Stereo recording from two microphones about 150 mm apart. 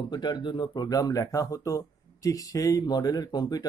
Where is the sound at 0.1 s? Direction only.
30° left (ahead or behind).